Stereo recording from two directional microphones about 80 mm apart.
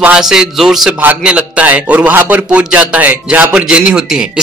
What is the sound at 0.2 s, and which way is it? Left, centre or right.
Speech, centre.